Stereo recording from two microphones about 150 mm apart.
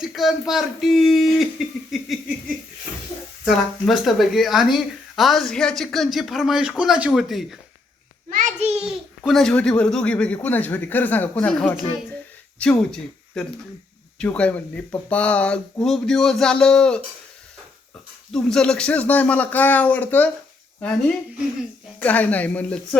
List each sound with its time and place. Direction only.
0.0 s speech: centre (ahead or behind)
3.5 s speech: centre (ahead or behind)
8.3 s a sound: 55° right (ahead or behind)
8.9 s speech: centre (ahead or behind)
18.3 s speech: 5° left (ahead or behind)
22.0 s speech: 10° left (ahead or behind)